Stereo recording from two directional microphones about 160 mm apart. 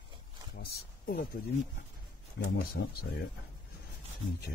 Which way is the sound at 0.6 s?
70° left (ahead or behind).